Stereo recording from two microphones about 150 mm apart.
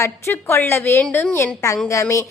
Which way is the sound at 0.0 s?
15° left (ahead or behind).